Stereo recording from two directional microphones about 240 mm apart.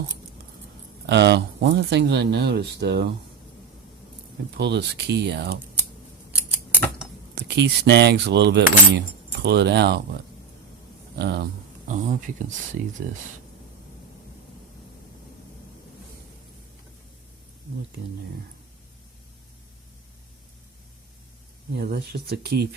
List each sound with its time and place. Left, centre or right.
1.0 s keys jangling: right
4.5 s keys jangling: right
7.3 s keys jangling: right
11.2 s keys jangling: right
11.9 s speech: right
21.8 s speech: right